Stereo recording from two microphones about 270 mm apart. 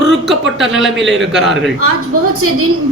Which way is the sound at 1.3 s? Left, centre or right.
Centre.